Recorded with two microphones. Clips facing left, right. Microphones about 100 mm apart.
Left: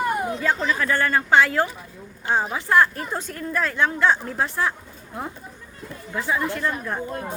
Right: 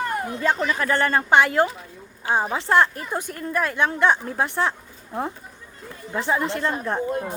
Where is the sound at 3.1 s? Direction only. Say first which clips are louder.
Right 1 dB; 15° right (ahead or behind).